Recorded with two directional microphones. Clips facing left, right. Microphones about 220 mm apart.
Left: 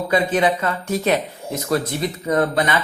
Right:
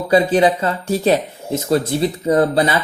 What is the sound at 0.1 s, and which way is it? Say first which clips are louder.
Speech: right 5 dB; 30° right (ahead or behind).